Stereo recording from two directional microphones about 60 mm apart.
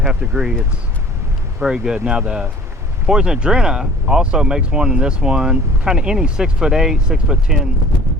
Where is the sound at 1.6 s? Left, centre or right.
Centre.